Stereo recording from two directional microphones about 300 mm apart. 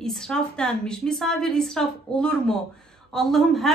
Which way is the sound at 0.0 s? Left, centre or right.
Centre.